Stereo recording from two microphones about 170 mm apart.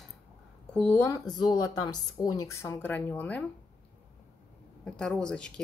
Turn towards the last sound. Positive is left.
turn(degrees=5)  # may be behind; listen again after turning